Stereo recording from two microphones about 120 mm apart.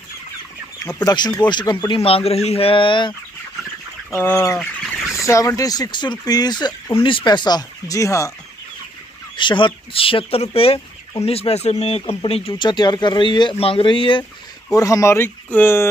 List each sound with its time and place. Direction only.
0.8 s speech: 35° left (ahead or behind)
2.0 s speech: 55° left (ahead or behind)
4.1 s speech: 20° left (ahead or behind)
4.6 s bird: 5° left (ahead or behind)
5.1 s speech: 25° left (ahead or behind)
9.4 s speech: 40° left (ahead or behind)
12.6 s speech: 35° left (ahead or behind)
14.7 s speech: 25° left (ahead or behind)